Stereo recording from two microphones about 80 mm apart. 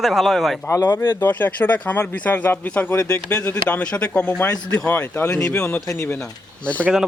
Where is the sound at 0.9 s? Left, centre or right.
Left.